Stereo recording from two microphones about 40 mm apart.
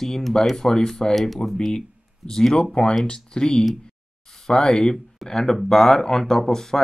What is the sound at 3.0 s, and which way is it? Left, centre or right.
Speech, left.